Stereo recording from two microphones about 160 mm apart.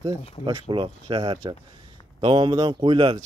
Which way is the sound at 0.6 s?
30° right (ahead or behind).